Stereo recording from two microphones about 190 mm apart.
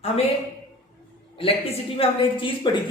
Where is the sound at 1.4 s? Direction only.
30° left (ahead or behind).